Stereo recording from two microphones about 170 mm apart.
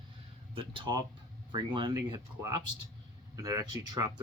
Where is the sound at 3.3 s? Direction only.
20° right (ahead or behind).